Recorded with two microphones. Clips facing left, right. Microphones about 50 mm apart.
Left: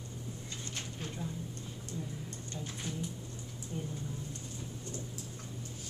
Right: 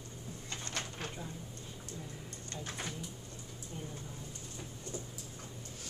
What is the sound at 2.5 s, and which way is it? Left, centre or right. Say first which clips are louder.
Bird: right 2 dB; right.